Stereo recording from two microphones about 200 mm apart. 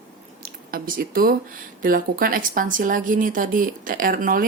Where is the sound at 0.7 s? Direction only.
45° right (ahead or behind).